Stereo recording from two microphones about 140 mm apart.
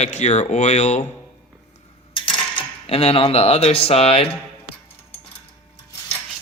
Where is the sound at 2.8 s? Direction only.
45° left (ahead or behind).